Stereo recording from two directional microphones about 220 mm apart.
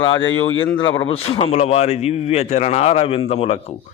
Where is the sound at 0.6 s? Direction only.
20° left (ahead or behind).